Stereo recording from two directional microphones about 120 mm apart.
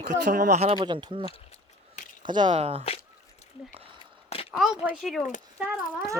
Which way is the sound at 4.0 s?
50° left (ahead or behind).